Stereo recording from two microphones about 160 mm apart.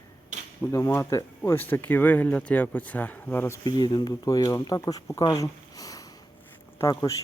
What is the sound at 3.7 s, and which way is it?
Speech, 30° left (ahead or behind).